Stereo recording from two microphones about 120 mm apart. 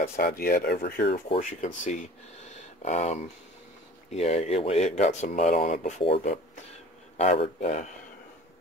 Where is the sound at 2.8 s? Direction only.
75° left (ahead or behind).